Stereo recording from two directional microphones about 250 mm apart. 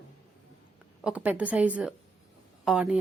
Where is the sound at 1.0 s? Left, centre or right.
Centre.